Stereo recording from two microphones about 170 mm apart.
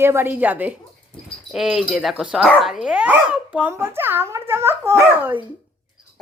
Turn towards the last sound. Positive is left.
turn(degrees=-15)  # may be behind; listen again after turning